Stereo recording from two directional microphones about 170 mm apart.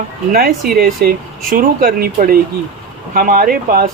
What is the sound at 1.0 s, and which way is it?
Speech, 55° right (ahead or behind).